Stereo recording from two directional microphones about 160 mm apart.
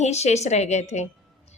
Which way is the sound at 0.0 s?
45° left (ahead or behind).